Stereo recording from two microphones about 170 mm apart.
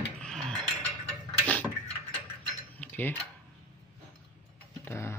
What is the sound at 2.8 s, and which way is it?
Mechanisms, 10° left (ahead or behind).